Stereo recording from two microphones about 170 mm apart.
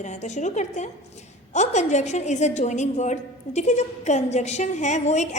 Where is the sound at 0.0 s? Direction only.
45° left (ahead or behind).